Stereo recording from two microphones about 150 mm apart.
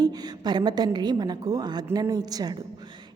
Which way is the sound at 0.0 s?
25° right (ahead or behind).